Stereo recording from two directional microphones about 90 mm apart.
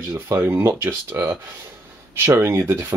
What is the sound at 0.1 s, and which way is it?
Speech, 25° right (ahead or behind).